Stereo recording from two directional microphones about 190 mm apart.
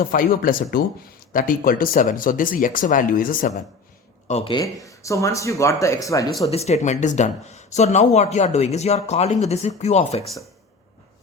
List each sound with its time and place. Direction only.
0.1 s speech: 45° left (ahead or behind)
4.3 s speech: 30° left (ahead or behind)
6.5 s speech: 35° left (ahead or behind)